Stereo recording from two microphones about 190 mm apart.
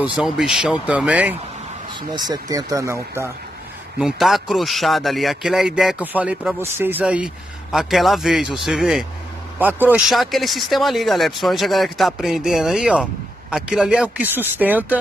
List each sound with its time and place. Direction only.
0.0 s speech: 5° right (ahead or behind)
2.0 s speech: 20° right (ahead or behind)
4.0 s speech: centre (ahead or behind)